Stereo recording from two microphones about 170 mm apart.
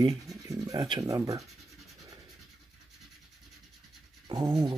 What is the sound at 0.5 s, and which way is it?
Speech, 20° right (ahead or behind).